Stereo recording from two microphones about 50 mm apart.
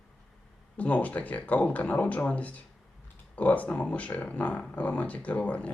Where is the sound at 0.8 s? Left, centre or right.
Left.